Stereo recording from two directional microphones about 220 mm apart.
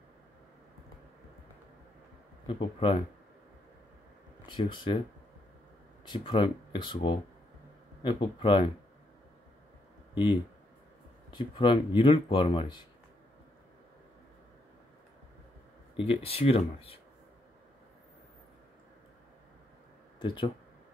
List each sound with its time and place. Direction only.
2.4 s speech: 25° left (ahead or behind)
4.5 s speech: 20° left (ahead or behind)
6.0 s speech: 20° left (ahead or behind)
10.1 s speech: 20° left (ahead or behind)
16.0 s speech: 25° left (ahead or behind)
20.2 s speech: 20° left (ahead or behind)